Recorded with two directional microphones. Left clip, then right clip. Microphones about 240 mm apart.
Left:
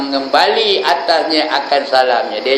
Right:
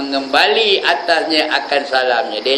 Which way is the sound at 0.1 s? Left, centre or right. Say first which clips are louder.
Left 1 dB; centre.